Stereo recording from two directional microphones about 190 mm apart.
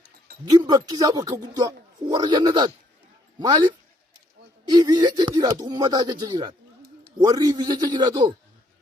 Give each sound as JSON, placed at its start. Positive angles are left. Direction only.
{"t": 0.5, "sound": "a man's voice", "side_deg": -25}
{"t": 4.7, "sound": "a man's voice", "side_deg": -20}